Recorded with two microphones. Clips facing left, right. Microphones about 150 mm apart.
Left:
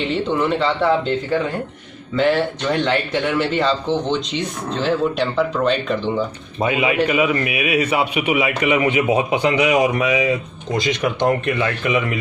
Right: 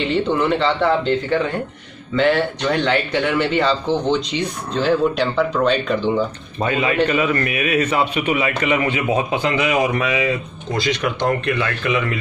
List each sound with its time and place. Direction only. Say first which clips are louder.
0.0 s a man's voice: right 1 dB; centre (ahead or behind)
6.6 s a man's voice: even; 10° left (ahead or behind)